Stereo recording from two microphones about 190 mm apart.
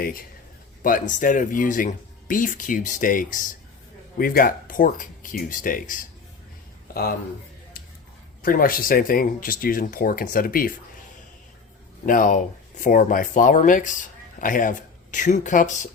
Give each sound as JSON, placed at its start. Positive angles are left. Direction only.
{"t": 0.0, "sound": "speech", "side_deg": 50}
{"t": 8.4, "sound": "speech", "side_deg": 50}
{"t": 12.0, "sound": "speech", "side_deg": 45}